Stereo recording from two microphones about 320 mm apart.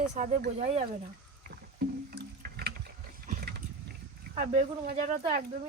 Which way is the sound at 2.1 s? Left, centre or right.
Right.